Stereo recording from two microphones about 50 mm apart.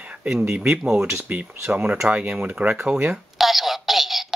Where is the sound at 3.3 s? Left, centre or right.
Centre.